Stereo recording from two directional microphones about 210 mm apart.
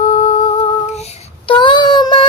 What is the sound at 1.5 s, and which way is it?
Child singing, 20° left (ahead or behind).